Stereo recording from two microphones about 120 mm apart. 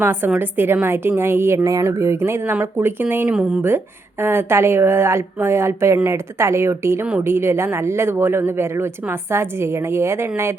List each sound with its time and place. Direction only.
0.0 s a woman's voice: 20° right (ahead or behind)